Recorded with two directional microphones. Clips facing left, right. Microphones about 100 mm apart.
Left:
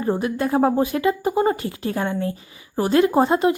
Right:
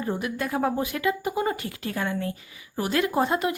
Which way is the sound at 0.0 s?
35° left (ahead or behind).